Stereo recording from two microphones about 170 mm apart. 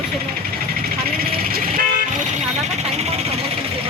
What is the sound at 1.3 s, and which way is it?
Vehicle, 60° right (ahead or behind).